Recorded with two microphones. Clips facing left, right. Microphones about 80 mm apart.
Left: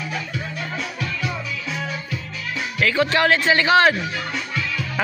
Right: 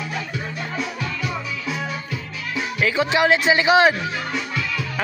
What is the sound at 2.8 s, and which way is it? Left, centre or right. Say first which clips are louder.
A man's voice: even; centre.